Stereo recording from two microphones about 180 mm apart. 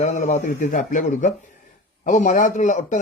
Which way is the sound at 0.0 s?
40° left (ahead or behind).